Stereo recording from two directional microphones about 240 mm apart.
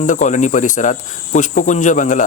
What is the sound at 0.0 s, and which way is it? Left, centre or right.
Speech, left.